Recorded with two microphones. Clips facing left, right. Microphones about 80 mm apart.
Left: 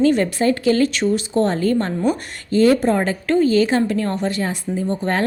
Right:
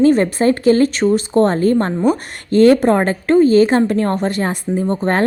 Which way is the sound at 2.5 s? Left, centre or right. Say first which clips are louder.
Right 4 dB; right.